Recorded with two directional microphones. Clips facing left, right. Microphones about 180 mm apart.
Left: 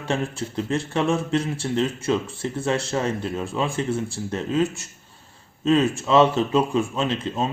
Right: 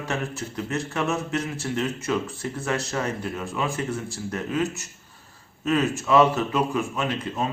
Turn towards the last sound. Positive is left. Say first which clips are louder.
# left 3 dB
turn(degrees=25)  # may be behind; listen again after turning